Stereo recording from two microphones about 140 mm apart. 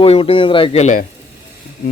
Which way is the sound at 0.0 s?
45° left (ahead or behind).